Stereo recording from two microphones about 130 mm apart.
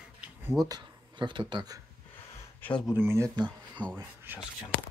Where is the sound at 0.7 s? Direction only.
35° right (ahead or behind).